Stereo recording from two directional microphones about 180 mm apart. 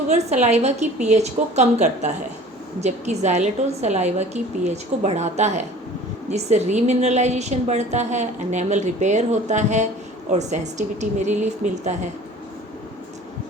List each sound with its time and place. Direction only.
0.1 s a woman's voice: 40° right (ahead or behind)